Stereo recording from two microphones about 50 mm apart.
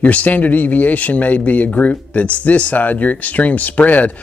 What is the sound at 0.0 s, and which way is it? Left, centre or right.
Speech, left.